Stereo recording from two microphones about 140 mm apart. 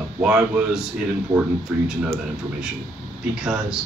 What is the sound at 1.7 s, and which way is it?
Speech, 10° right (ahead or behind).